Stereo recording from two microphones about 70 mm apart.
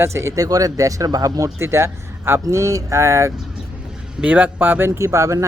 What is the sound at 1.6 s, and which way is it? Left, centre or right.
Speech, right.